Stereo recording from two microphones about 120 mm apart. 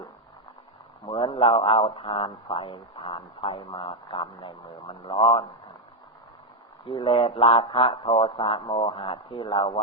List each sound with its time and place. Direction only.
1.1 s speech: 50° left (ahead or behind)
6.8 s speech: 45° left (ahead or behind)